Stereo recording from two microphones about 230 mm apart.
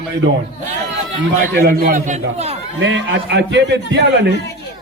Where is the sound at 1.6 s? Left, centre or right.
Right.